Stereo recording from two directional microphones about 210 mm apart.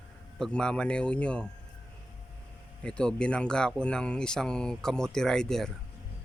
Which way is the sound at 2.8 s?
5° left (ahead or behind).